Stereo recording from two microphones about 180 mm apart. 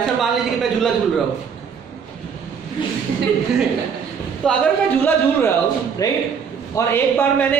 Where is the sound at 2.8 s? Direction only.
25° left (ahead or behind).